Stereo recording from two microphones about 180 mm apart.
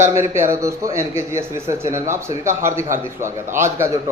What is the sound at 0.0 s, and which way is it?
A man's voice, 15° right (ahead or behind).